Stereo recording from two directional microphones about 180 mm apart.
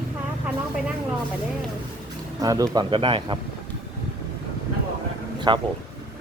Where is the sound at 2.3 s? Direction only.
20° right (ahead or behind).